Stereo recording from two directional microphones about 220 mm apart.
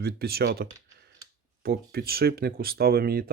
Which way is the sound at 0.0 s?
45° right (ahead or behind).